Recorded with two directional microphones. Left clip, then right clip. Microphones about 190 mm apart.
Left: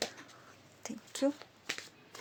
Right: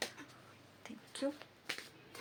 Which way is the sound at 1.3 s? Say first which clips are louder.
Left 3 dB; 30° left (ahead or behind).